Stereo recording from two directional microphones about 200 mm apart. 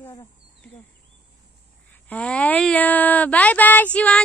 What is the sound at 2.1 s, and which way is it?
A woman's voice, 5° left (ahead or behind).